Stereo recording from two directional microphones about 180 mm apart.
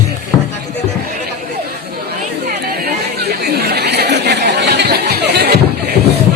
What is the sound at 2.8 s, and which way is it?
Chatter, 60° right (ahead or behind).